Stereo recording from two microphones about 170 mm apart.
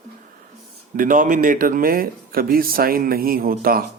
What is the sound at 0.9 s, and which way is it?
Speech, 50° right (ahead or behind).